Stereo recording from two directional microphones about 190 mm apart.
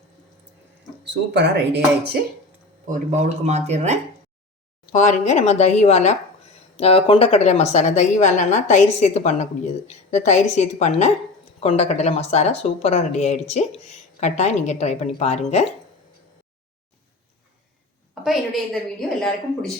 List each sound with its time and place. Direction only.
1.0 s speech: 65° right (ahead or behind)
2.8 s speech: 40° right (ahead or behind)
4.9 s speech: 40° left (ahead or behind)
18.1 s a woman's voice: centre (ahead or behind)